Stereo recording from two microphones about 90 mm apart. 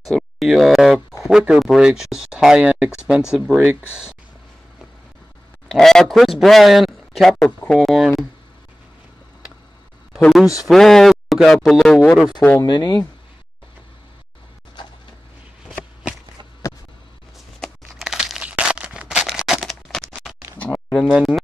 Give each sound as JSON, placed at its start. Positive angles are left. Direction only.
{"t": 0.1, "sound": "speech", "side_deg": 0}
{"t": 5.7, "sound": "speech", "side_deg": 5}
{"t": 7.4, "sound": "speech", "side_deg": 15}
{"t": 7.8, "sound": "speech", "side_deg": 0}
{"t": 10.6, "sound": "speech", "side_deg": 0}
{"t": 12.6, "sound": "speech", "side_deg": 50}
{"t": 17.6, "sound": "a sound", "side_deg": -5}
{"t": 20.5, "sound": "a sound", "side_deg": 15}
{"t": 21.1, "sound": "speech", "side_deg": -5}